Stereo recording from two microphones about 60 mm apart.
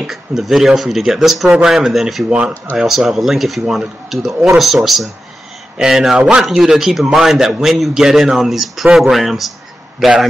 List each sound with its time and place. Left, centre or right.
0.0 s a man's voice: centre
2.2 s speech: centre
2.5 s speech: left
2.8 s a man's voice: centre